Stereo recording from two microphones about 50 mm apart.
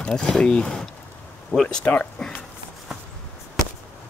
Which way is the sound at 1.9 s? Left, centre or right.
Left.